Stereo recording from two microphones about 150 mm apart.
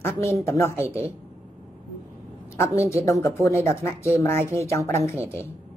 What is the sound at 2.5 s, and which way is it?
A woman's voice, 20° left (ahead or behind).